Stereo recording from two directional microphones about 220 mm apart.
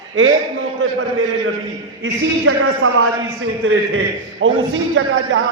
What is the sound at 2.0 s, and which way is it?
A man's voice, 65° right (ahead or behind).